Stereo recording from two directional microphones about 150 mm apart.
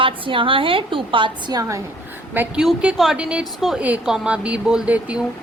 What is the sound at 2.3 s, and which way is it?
A woman's voice, 10° right (ahead or behind).